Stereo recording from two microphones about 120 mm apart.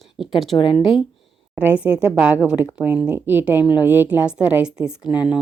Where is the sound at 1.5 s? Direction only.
10° right (ahead or behind).